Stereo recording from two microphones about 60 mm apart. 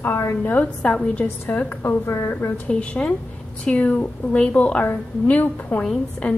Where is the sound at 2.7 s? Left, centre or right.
Centre.